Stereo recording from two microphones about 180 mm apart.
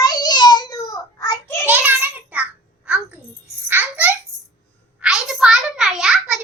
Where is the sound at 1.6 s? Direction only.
10° right (ahead or behind).